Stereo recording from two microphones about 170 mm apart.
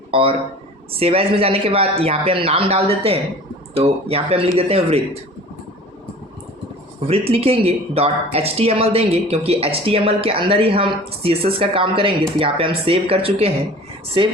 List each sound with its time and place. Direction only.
0.1 s speech: 30° right (ahead or behind)
7.1 s speech: 35° right (ahead or behind)